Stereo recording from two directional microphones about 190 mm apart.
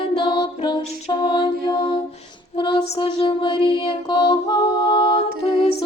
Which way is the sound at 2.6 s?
25° left (ahead or behind).